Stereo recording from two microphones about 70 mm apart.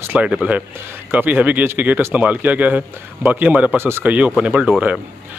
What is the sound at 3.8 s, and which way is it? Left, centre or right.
Speech, right.